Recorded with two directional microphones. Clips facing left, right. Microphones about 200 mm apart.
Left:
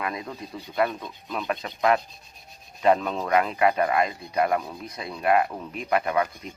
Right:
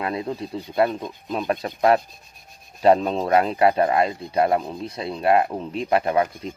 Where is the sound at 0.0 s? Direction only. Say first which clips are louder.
Right 6 dB; 30° right (ahead or behind).